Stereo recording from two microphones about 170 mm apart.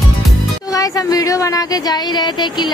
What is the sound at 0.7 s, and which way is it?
Speech, 20° left (ahead or behind).